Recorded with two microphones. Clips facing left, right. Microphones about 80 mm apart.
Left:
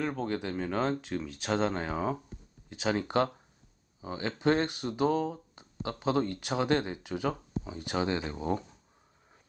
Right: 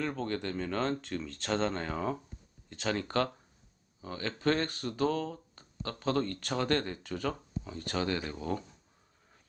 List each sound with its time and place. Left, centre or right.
0.0 s speech: centre